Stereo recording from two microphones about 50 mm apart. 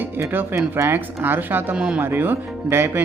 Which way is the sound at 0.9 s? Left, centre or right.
Right.